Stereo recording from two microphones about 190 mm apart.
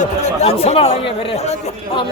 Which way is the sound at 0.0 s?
35° left (ahead or behind).